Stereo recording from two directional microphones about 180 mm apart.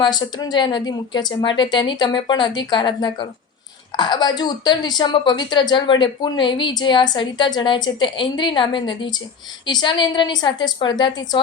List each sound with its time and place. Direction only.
0.0 s a woman's voice: 25° left (ahead or behind)